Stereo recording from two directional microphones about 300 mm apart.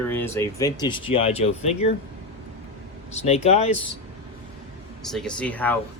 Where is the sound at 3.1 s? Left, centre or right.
Left.